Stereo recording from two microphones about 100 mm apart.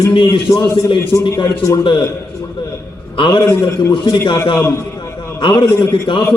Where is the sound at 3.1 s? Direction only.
55° left (ahead or behind).